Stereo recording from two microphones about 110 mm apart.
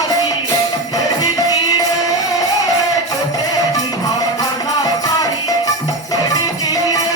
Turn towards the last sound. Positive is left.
turn(degrees=30)  # may be behind; listen again after turning